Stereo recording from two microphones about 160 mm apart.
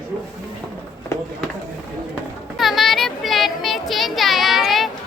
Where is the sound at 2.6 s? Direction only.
Centre (ahead or behind).